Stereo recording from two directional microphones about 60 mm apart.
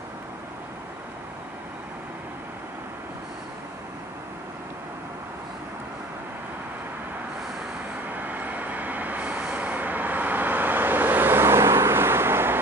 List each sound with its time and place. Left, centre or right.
8.1 s vehicle: right